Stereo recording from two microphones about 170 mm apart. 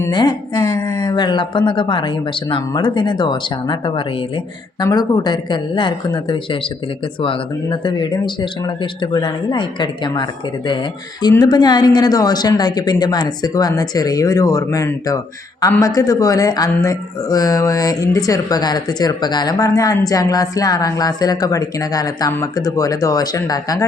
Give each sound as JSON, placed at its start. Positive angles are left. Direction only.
{"t": 0.0, "sound": "speech", "side_deg": 25}